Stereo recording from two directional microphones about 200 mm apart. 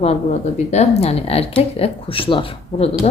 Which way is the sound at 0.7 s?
35° left (ahead or behind).